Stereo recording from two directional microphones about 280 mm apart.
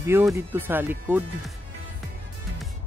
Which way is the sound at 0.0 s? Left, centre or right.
Centre.